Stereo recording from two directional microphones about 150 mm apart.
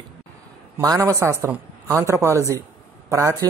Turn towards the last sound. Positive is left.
turn(degrees=-20)  # may be behind; listen again after turning